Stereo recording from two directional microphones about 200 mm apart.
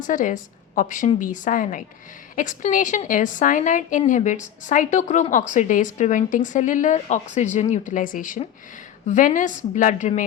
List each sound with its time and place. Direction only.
0.0 s a woman's voice: 40° left (ahead or behind)